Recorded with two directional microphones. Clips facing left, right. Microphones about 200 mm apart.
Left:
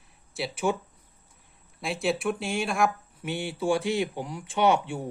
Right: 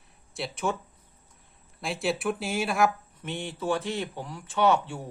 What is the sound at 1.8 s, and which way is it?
Speech, centre (ahead or behind).